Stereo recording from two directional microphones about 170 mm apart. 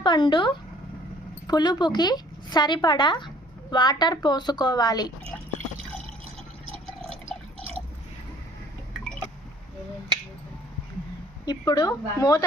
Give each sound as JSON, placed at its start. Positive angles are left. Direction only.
{"t": 0.0, "sound": "speech", "side_deg": 25}
{"t": 11.4, "sound": "speech", "side_deg": 25}